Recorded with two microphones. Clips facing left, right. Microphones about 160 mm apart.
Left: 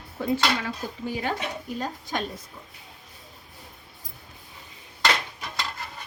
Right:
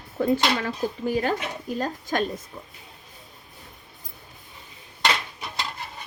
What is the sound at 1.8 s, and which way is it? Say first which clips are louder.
Speech: right 5 dB; 45° right (ahead or behind).